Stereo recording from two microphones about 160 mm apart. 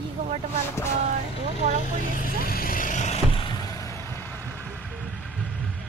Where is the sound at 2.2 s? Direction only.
65° left (ahead or behind); by 3.2 s 50° left (ahead or behind).